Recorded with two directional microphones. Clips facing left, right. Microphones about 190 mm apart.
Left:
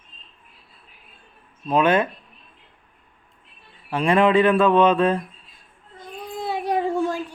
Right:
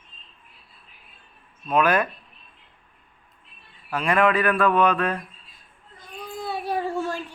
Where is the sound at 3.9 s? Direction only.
30° left (ahead or behind).